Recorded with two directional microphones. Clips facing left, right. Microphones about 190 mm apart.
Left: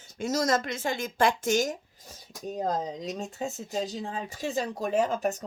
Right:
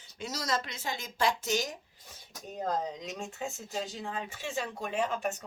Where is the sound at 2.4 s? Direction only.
35° left (ahead or behind).